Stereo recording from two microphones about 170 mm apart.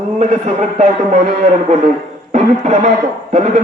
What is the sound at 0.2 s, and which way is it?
A man's voice, 45° right (ahead or behind).